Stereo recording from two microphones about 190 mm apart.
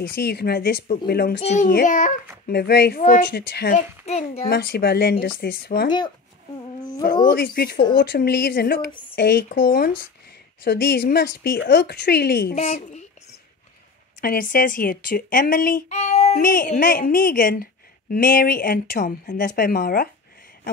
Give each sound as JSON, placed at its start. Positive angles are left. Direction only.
{"t": 0.0, "sound": "speech", "side_deg": 55}
{"t": 1.4, "sound": "a child's voice", "side_deg": 35}
{"t": 3.0, "sound": "speech", "side_deg": 45}
{"t": 3.3, "sound": "speech", "side_deg": 60}
{"t": 3.7, "sound": "a child's voice", "side_deg": 35}
{"t": 4.5, "sound": "speech", "side_deg": 55}
{"t": 5.9, "sound": "speech", "side_deg": 20}
{"t": 7.2, "sound": "speech", "side_deg": 55}
{"t": 12.5, "sound": "a child's voice", "side_deg": 35}
{"t": 14.2, "sound": "speech", "side_deg": 45}
{"t": 16.3, "sound": "speech", "side_deg": 50}